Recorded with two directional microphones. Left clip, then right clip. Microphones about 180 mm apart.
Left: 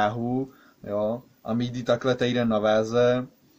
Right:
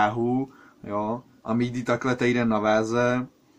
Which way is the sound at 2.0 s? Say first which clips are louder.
Even; 55° left (ahead or behind).